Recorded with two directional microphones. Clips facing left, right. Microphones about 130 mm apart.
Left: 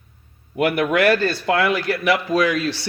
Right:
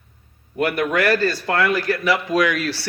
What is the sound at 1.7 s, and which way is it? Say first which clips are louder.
Speech: even; 65° left (ahead or behind).